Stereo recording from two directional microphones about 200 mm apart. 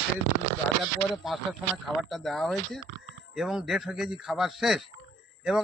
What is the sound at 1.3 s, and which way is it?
A man's voice, centre (ahead or behind).